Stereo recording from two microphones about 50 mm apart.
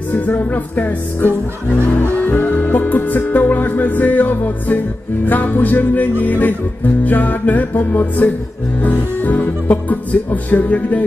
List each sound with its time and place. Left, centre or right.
0.1 s music: left
2.3 s music: left